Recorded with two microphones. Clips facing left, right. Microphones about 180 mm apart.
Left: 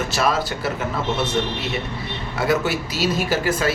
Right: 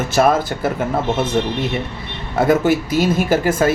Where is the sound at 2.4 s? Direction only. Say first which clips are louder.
Right 7 dB; 50° right (ahead or behind).